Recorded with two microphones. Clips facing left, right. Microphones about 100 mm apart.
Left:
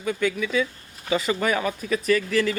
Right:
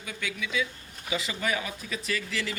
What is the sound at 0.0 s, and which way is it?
A man's voice, 45° left (ahead or behind).